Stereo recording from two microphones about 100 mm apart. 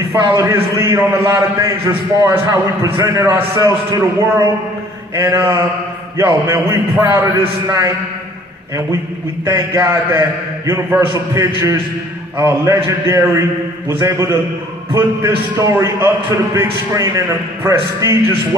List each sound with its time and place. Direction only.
0.1 s a man's voice: 30° right (ahead or behind)
9.5 s a man's voice: 25° right (ahead or behind)